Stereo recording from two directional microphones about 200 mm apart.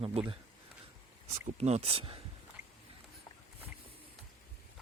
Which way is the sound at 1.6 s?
30° right (ahead or behind).